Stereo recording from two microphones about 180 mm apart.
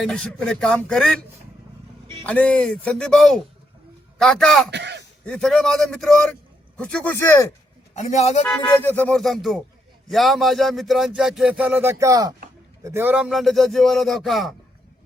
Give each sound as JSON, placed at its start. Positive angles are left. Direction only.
{"t": 0.0, "sound": "speech", "side_deg": 5}
{"t": 2.2, "sound": "speech", "side_deg": 5}
{"t": 4.7, "sound": "speech", "side_deg": -70}
{"t": 5.2, "sound": "speech", "side_deg": 5}
{"t": 7.9, "sound": "a man's voice", "side_deg": 40}
{"t": 8.7, "sound": "speech", "side_deg": 10}